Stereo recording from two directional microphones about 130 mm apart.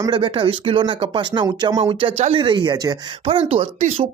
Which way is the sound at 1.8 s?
45° right (ahead or behind).